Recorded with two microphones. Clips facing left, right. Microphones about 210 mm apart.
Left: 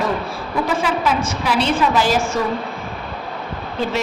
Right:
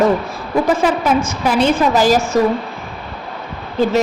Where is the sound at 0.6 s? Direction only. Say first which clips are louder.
Right 3 dB; 45° right (ahead or behind).